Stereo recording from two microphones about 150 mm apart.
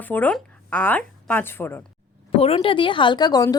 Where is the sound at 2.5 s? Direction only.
35° left (ahead or behind).